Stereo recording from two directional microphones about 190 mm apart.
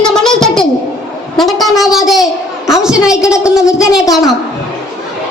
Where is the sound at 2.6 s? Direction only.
Centre (ahead or behind).